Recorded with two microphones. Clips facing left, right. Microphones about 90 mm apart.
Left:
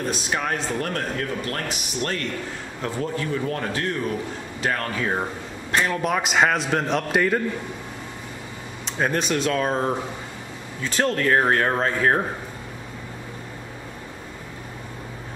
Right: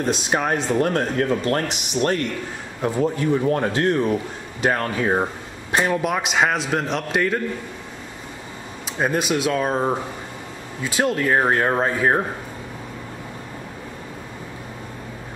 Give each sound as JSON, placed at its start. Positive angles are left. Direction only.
{"t": 0.1, "sound": "speech", "side_deg": -25}
{"t": 5.9, "sound": "a man's voice", "side_deg": -5}
{"t": 8.8, "sound": "speech", "side_deg": -5}